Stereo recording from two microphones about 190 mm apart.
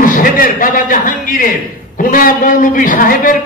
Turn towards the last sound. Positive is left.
turn(degrees=45)  # may be behind; listen again after turning